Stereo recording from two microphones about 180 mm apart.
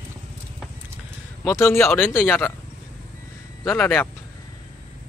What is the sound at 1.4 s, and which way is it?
Speech, 15° left (ahead or behind).